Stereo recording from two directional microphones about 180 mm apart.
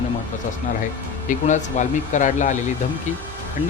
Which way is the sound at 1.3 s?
45° left (ahead or behind).